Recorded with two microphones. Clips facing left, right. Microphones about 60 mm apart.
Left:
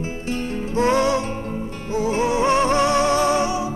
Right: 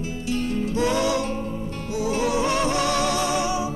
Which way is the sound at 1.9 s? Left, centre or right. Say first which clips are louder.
Left 3 dB; left.